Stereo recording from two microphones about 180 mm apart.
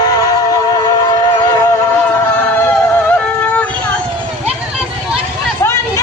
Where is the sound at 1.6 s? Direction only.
15° left (ahead or behind).